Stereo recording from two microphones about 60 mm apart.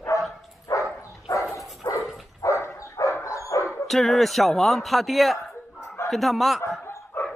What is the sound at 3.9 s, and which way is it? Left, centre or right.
Speech, centre.